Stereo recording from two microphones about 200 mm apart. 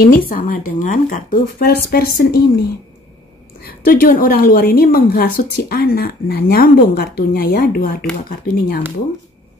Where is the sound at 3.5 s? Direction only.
50° left (ahead or behind).